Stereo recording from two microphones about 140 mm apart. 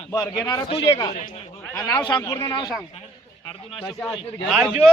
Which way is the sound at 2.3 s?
20° left (ahead or behind).